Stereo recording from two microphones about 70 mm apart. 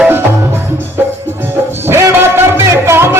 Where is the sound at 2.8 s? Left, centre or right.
Right.